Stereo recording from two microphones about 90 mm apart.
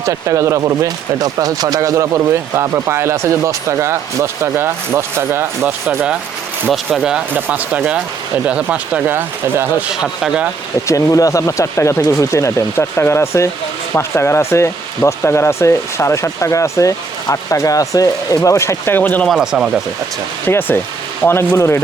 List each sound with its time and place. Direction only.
0.0 s speech: 35° right (ahead or behind)
6.9 s speech: 5° right (ahead or behind)
7.3 s speech: 20° right (ahead or behind)
9.1 s speech: 25° right (ahead or behind)
10.0 s speech: 5° right (ahead or behind)
10.8 s speech: 40° left (ahead or behind); by 19.3 s 20° left (ahead or behind)
19.3 s speech: 5° right (ahead or behind)
20.4 s speech: 25° left (ahead or behind)